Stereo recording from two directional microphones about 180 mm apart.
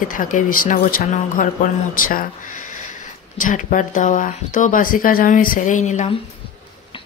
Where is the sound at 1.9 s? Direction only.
50° left (ahead or behind).